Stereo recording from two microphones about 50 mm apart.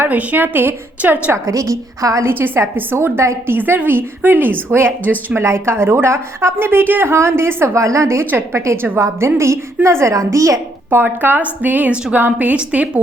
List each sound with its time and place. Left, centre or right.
0.0 s a woman's voice: right
1.0 s a woman's voice: right
1.5 s a woman's voice: right
2.7 s a woman's voice: right
3.8 s a woman's voice: right
5.4 s a woman's voice: right
7.1 s a woman's voice: right
10.9 s a woman's voice: right